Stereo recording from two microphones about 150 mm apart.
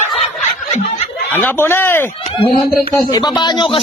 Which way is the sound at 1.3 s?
10° left (ahead or behind).